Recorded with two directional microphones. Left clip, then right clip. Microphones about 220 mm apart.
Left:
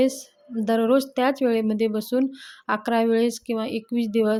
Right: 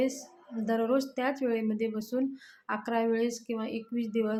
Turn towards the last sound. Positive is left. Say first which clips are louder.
# left 9 dB
turn(degrees=40)  # may be behind; listen again after turning